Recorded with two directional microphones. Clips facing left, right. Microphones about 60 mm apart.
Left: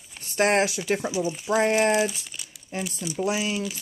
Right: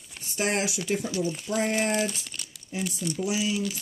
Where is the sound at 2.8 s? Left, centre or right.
Centre.